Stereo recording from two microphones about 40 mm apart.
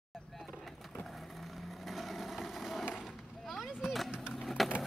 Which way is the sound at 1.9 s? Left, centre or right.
Centre.